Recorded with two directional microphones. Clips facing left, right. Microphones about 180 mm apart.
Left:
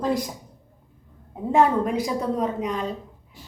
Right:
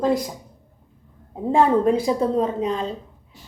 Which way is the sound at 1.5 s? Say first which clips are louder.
Right 3 dB; 30° right (ahead or behind).